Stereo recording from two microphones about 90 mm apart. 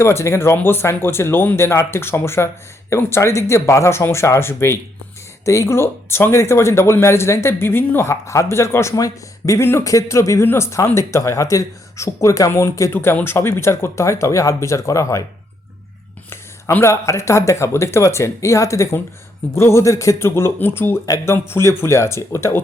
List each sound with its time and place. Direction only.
0.0 s speech: 30° left (ahead or behind)
9.6 s speech: 30° left (ahead or behind)
16.8 s speech: 30° left (ahead or behind)